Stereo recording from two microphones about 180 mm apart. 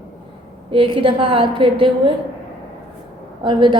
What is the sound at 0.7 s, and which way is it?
A woman's voice, 30° right (ahead or behind).